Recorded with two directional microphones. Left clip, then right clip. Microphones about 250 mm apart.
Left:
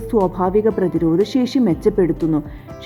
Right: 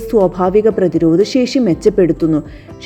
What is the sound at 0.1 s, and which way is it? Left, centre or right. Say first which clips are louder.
A woman's voice: right 5 dB; centre.